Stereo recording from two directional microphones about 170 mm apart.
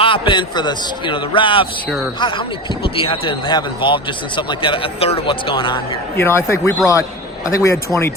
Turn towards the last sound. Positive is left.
turn(degrees=20)  # may be behind; listen again after turning